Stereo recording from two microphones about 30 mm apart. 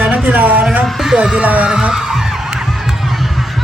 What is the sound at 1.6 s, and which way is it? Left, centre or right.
Speech, right.